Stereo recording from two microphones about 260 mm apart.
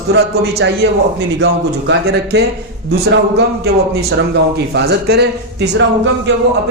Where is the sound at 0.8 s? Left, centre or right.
Right.